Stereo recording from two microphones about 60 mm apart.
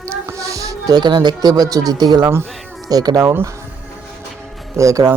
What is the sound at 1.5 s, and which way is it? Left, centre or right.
Speech, right.